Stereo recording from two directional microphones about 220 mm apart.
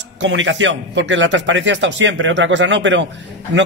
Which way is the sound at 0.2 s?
55° right (ahead or behind).